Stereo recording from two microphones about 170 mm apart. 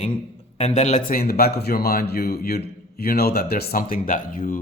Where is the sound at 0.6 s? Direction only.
40° left (ahead or behind).